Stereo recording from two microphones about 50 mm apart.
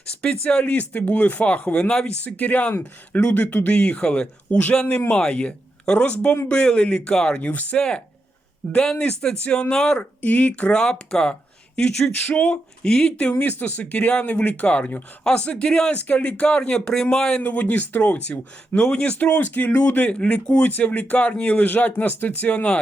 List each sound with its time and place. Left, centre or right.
0.0 s speech: left
7.4 s speech: left
7.8 s speech: centre
10.0 s speech: left
10.7 s speech: centre
13.3 s speech: left; by 16.0 s centre
16.0 s speech: left
17.4 s speech: left
18.8 s speech: centre
19.2 s speech: left